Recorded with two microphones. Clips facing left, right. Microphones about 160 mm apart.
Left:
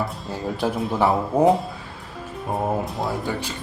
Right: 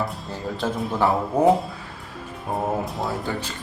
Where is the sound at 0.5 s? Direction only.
15° left (ahead or behind).